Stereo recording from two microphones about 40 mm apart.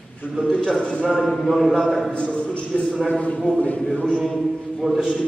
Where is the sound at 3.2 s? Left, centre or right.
Left.